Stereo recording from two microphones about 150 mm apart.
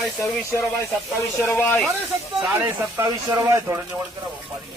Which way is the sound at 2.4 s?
15° right (ahead or behind).